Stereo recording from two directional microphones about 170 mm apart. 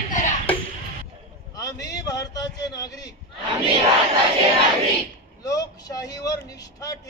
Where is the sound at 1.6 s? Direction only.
20° left (ahead or behind).